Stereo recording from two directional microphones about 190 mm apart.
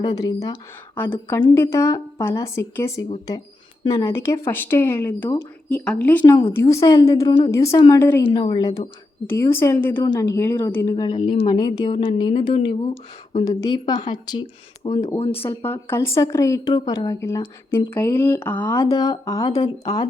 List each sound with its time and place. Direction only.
0.0 s a woman's voice: 20° left (ahead or behind)
5.7 s a woman's voice: 5° left (ahead or behind)
8.3 s a woman's voice: 25° left (ahead or behind)
11.2 s speech: 45° left (ahead or behind)
11.4 s speech: 20° left (ahead or behind)
15.6 s a woman's voice: 15° left (ahead or behind)